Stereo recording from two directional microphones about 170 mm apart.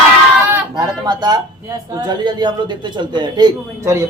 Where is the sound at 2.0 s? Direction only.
25° right (ahead or behind).